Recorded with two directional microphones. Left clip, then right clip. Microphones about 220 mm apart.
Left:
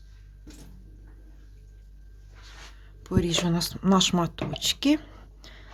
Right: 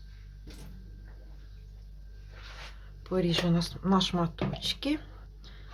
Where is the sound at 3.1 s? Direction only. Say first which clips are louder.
Left 2 dB; 45° left (ahead or behind).